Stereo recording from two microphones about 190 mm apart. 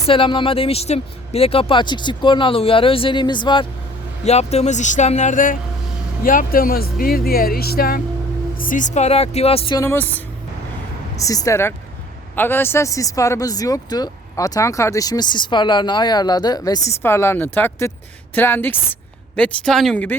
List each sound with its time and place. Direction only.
0.1 s speech: 25° left (ahead or behind)
9.7 s speech: 15° left (ahead or behind)